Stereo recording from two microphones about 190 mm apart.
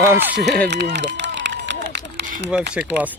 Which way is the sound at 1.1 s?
70° right (ahead or behind).